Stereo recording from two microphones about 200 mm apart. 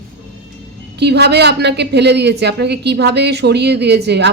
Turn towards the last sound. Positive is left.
turn(degrees=-55)  # may be behind; listen again after turning